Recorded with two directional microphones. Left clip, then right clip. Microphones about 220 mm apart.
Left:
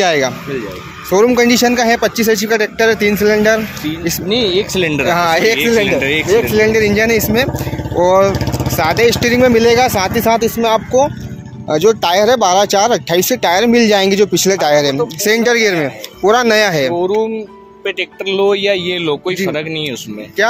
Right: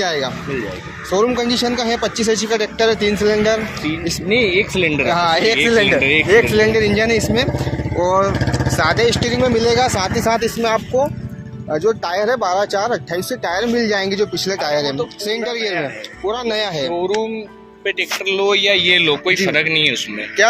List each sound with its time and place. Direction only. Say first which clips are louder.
0.0 s speech: left 6 dB; 50° left (ahead or behind)
8.5 s vehicle: left 1 dB; centre (ahead or behind)
8.7 s speech: left 4 dB; 35° left (ahead or behind)
17.8 s speech: left 1 dB; 30° left (ahead or behind)